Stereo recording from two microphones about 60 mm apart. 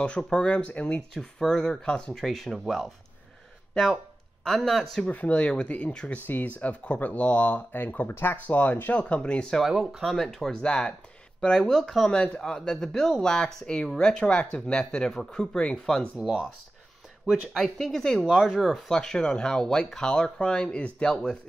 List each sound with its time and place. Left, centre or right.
0.2 s speech: centre
5.1 s speech: left
8.4 s speech: left
9.6 s speech: centre
16.2 s speech: centre
17.5 s speech: centre